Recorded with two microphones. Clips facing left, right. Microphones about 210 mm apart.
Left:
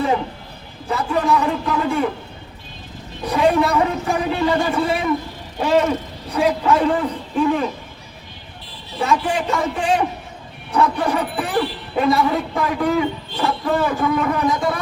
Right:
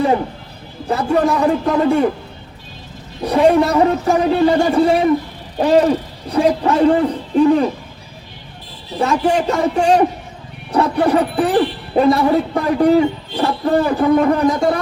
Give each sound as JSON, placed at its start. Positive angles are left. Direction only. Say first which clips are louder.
{"t": 0.9, "sound": "speech", "louder": "right 4 dB", "side_deg": -35}
{"t": 3.2, "sound": "speech", "louder": "right 4 dB", "side_deg": -35}
{"t": 9.0, "sound": "speech", "louder": "right 4 dB", "side_deg": -35}